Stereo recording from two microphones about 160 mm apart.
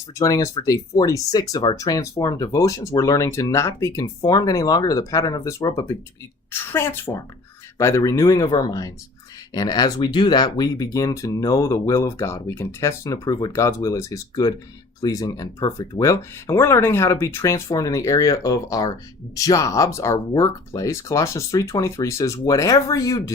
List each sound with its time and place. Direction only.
0.2 s a woman's voice: 20° left (ahead or behind)